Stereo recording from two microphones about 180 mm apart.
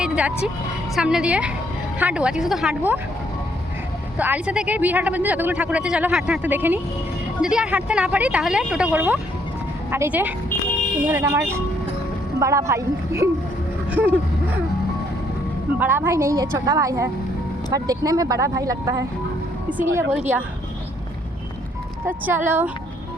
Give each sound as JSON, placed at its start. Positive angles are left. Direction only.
{"t": 0.0, "sound": "speech", "side_deg": -5}
{"t": 4.2, "sound": "speech", "side_deg": -10}
{"t": 15.8, "sound": "speech", "side_deg": -10}
{"t": 22.0, "sound": "speech", "side_deg": -10}